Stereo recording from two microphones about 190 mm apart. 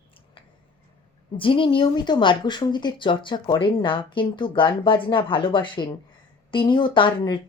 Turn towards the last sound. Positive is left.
turn(degrees=25)  # may be behind; listen again after turning